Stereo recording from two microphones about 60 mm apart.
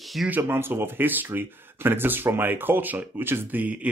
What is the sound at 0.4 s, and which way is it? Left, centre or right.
Speech, right.